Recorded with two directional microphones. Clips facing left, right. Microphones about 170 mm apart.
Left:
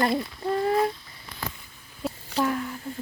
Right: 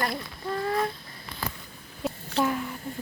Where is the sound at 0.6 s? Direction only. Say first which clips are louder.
Left 4 dB; 20° left (ahead or behind).